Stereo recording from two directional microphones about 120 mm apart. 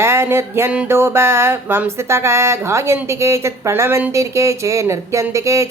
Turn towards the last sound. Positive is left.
turn(degrees=-25)  # may be behind; listen again after turning